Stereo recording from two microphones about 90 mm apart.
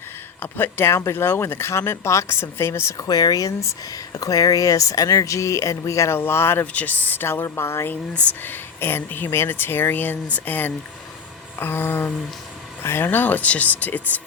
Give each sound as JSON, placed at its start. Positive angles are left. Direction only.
{"t": 0.3, "sound": "speech", "side_deg": 25}
{"t": 3.1, "sound": "speech", "side_deg": 45}